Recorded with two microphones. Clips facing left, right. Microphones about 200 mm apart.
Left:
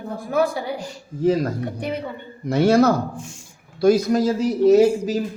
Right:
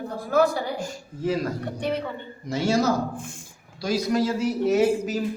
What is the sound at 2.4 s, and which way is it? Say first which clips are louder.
A man's voice: left 7 dB; 60° left (ahead or behind).